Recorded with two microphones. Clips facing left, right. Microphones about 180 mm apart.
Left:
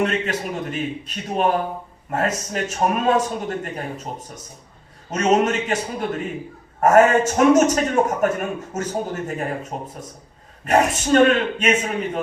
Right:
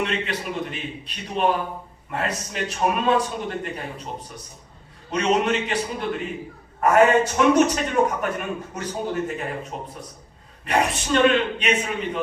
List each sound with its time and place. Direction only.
0.0 s a man's voice: 45° left (ahead or behind)
5.1 s a man's voice: 45° left (ahead or behind)